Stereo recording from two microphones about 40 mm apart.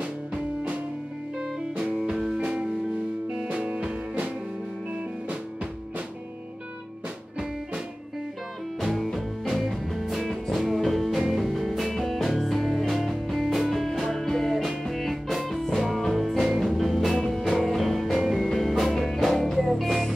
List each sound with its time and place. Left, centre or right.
0.0 s music: right
2.0 s music: centre
3.5 s music: right
8.8 s music: centre